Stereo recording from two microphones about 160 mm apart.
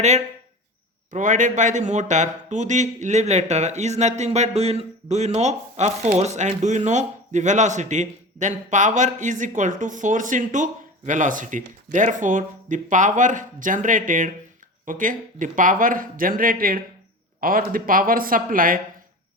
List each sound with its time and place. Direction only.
1.1 s speech: 50° right (ahead or behind)